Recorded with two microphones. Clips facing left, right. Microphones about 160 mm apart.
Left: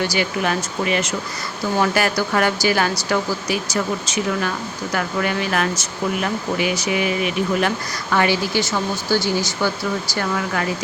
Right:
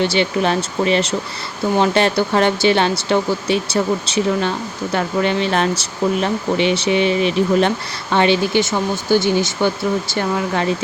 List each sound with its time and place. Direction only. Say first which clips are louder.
0.0 s speech: right 4 dB; 25° right (ahead or behind)